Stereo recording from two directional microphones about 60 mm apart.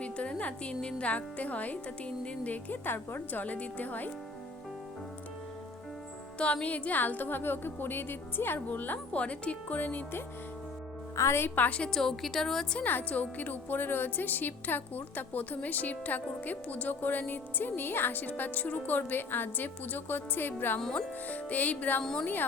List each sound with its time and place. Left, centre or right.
0.0 s speech: centre
6.4 s speech: left
11.2 s a woman's voice: left
11.8 s a woman's voice: centre
12.8 s a woman's voice: left